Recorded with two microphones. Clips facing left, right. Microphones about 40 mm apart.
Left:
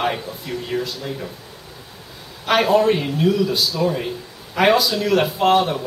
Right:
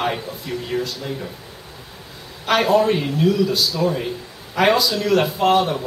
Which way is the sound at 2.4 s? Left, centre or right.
Centre.